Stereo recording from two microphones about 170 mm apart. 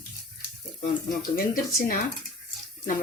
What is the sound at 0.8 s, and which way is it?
Speech, 55° left (ahead or behind).